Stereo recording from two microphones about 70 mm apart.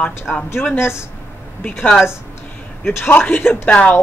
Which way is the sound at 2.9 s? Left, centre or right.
Left.